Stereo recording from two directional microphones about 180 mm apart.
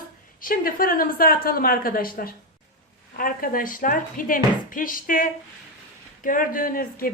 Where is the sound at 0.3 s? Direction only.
50° left (ahead or behind).